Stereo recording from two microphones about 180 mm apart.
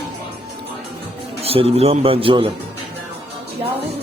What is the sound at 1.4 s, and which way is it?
A man's voice, 35° right (ahead or behind).